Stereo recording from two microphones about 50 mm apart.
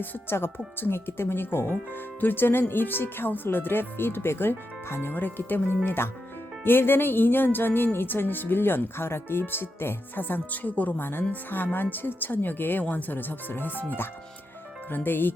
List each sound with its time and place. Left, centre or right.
0.0 s speech: left
0.3 s speech: left
5.1 s speech: left